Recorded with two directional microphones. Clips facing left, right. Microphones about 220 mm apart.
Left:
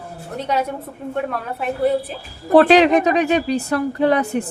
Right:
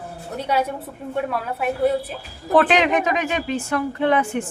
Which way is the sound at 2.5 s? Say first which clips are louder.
Left 6 dB; 35° left (ahead or behind).